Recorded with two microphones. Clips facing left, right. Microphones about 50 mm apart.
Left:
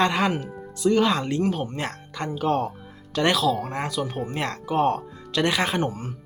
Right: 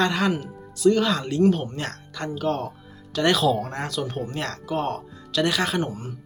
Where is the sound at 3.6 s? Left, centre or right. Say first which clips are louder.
Left 1 dB; centre.